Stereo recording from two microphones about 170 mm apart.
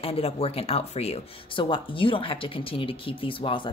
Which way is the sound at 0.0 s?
35° left (ahead or behind).